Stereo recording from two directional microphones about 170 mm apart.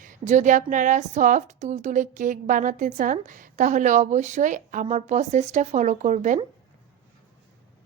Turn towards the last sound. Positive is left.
turn(degrees=-45)  # may be behind; listen again after turning